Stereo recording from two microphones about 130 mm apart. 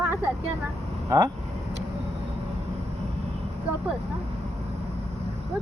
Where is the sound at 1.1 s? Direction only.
25° right (ahead or behind).